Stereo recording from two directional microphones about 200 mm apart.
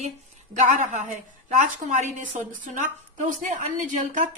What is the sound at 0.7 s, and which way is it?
A woman's voice, 40° right (ahead or behind).